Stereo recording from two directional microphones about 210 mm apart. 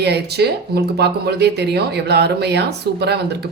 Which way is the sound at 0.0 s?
50° right (ahead or behind).